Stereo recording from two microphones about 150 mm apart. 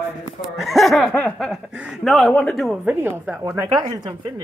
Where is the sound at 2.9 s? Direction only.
15° right (ahead or behind).